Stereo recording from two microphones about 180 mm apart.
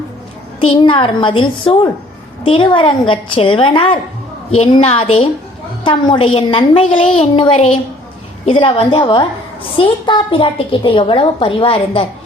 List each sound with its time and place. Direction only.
0.6 s a woman's voice: 30° left (ahead or behind)